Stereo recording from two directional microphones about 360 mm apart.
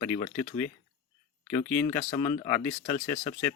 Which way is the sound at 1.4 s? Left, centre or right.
Centre.